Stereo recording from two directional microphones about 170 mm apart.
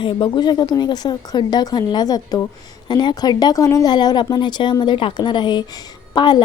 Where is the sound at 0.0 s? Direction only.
30° left (ahead or behind).